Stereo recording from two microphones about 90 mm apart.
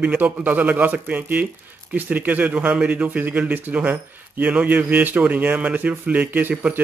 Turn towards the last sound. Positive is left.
turn(degrees=-20)  # may be behind; listen again after turning